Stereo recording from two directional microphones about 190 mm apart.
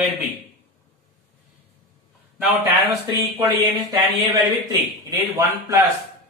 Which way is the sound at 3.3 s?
20° right (ahead or behind).